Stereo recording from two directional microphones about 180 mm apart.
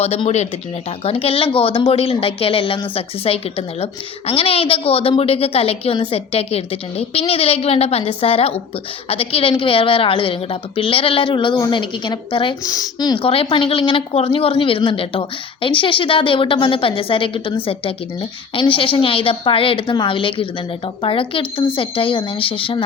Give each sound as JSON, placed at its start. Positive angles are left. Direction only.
{"t": 0.0, "sound": "a woman's voice", "side_deg": 35}